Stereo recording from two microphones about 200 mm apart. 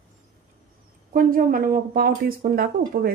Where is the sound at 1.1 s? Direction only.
40° right (ahead or behind).